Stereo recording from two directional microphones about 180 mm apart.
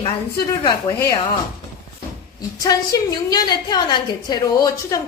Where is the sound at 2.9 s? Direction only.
20° left (ahead or behind).